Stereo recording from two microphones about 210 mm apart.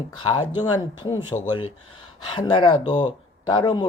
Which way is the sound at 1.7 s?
90° left.